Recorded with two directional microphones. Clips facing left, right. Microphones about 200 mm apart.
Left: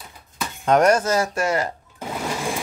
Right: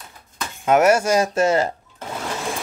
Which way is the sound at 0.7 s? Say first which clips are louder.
Right 1 dB; 5° right (ahead or behind).